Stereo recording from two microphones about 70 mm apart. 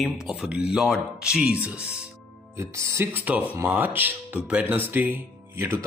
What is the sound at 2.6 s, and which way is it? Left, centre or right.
Speech, right.